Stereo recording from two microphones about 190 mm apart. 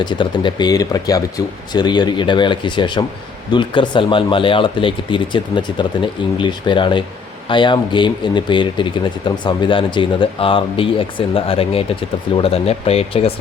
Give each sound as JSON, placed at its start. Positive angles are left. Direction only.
{"t": 0.0, "sound": "speech", "side_deg": 25}